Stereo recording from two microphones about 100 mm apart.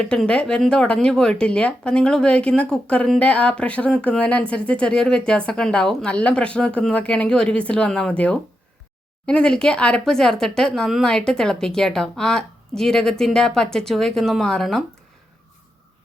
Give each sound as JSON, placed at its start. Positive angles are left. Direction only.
{"t": 0.0, "sound": "speech", "side_deg": 10}